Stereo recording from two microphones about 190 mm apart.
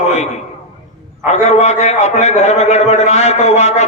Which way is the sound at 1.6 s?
35° left (ahead or behind).